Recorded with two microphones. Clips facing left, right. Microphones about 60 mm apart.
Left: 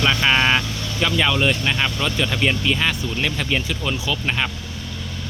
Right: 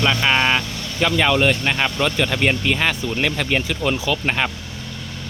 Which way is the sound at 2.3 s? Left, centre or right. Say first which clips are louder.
Right 1 dB; right.